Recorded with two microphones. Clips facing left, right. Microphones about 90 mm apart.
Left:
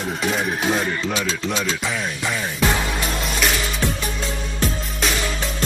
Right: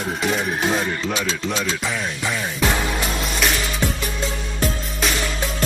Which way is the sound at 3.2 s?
Centre (ahead or behind).